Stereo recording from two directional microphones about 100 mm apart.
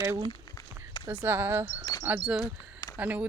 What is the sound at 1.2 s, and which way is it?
Speech, 20° right (ahead or behind).